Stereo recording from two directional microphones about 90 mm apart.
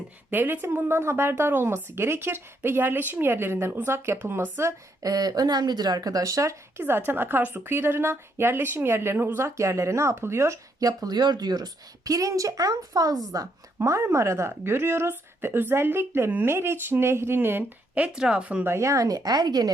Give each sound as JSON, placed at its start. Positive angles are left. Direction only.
{"t": 0.3, "sound": "a woman's voice", "side_deg": -20}
{"t": 5.1, "sound": "speech", "side_deg": -45}
{"t": 10.8, "sound": "a woman's voice", "side_deg": -40}
{"t": 13.7, "sound": "speech", "side_deg": -30}
{"t": 18.6, "sound": "speech", "side_deg": -30}